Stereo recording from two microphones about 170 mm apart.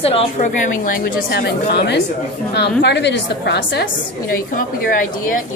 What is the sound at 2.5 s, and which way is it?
A woman's voice, 90° left.